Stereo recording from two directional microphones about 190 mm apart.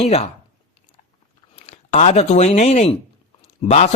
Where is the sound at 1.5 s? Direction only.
35° left (ahead or behind).